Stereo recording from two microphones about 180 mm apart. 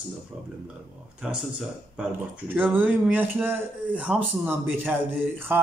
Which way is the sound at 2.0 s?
10° right (ahead or behind).